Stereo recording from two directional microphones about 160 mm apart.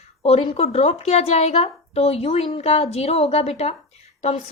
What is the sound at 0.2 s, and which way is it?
A woman's voice, 40° left (ahead or behind).